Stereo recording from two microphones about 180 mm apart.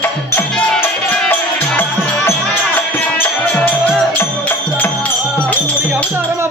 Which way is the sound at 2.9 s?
10° left (ahead or behind).